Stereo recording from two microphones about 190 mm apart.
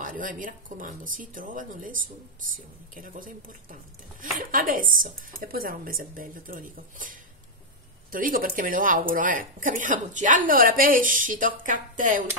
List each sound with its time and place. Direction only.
0.0 s a woman's voice: 45° right (ahead or behind)